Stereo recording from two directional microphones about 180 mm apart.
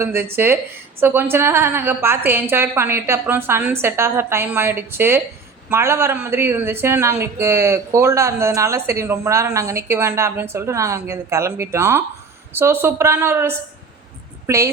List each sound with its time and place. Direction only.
0.0 s a woman's voice: 15° right (ahead or behind)